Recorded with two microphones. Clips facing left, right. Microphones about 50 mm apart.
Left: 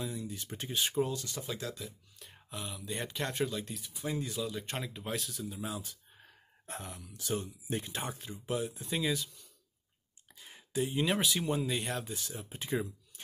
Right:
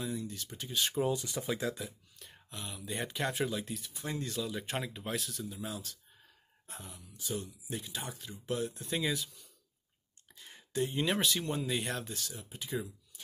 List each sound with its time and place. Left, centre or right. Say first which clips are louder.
0.0 s speech: right 1 dB; centre
0.5 s speech: left 1 dB; left
1.0 s speech: right 4 dB; centre
2.1 s speech: left 3 dB; centre
6.2 s a sound: left 8 dB; left
7.7 s speech: left 4 dB; left
8.5 s speech: left 1 dB; centre
12.4 s speech: left 4 dB; left